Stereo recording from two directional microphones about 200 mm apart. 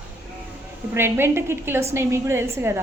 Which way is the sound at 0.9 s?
10° right (ahead or behind).